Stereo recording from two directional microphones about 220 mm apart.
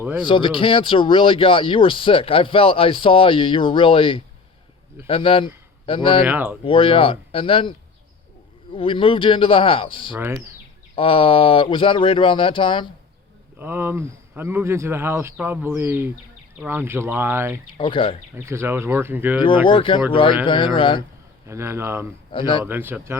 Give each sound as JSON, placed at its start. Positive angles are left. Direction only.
{"t": 0.0, "sound": "speech", "side_deg": -10}
{"t": 0.3, "sound": "speech", "side_deg": 25}
{"t": 6.2, "sound": "speech", "side_deg": -10}
{"t": 6.7, "sound": "speech", "side_deg": 25}
{"t": 13.6, "sound": "speech", "side_deg": -10}
{"t": 17.7, "sound": "speech", "side_deg": 25}
{"t": 18.3, "sound": "speech", "side_deg": -10}
{"t": 19.6, "sound": "speech", "side_deg": 25}
{"t": 21.4, "sound": "speech", "side_deg": -10}
{"t": 22.3, "sound": "a man's voice", "side_deg": 20}
{"t": 22.6, "sound": "speech", "side_deg": -10}